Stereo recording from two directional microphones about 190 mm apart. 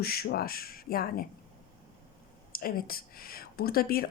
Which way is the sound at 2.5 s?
50° left (ahead or behind).